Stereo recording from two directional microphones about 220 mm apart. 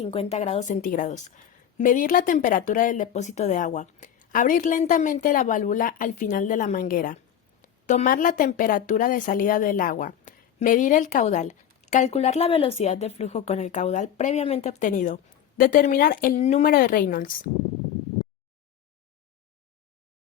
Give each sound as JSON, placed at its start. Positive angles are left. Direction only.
{"t": 0.0, "sound": "speech", "side_deg": 25}